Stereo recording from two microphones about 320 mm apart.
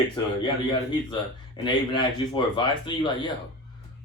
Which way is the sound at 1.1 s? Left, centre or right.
Centre.